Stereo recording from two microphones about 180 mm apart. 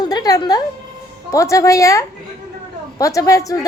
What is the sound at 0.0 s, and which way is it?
Music, 20° left (ahead or behind).